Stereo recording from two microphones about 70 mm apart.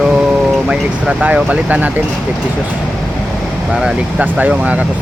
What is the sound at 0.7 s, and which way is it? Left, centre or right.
Speech, centre.